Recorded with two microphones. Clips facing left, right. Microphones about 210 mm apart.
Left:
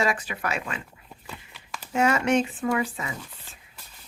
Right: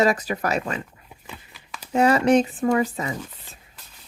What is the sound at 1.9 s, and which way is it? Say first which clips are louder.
Speech: right 5 dB; 35° right (ahead or behind).